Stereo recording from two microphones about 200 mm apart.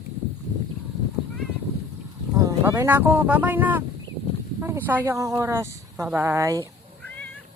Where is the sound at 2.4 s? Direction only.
15° right (ahead or behind).